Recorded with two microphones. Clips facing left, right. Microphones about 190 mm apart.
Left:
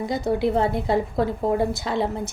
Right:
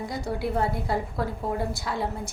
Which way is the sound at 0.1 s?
20° left (ahead or behind).